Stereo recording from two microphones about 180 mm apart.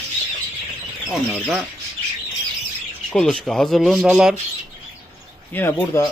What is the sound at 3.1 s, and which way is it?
Speech, 5° left (ahead or behind).